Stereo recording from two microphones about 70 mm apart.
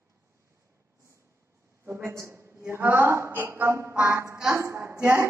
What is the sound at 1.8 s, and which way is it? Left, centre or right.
A man's voice, right.